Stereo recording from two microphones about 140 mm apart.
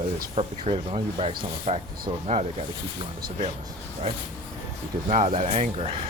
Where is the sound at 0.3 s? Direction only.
45° right (ahead or behind).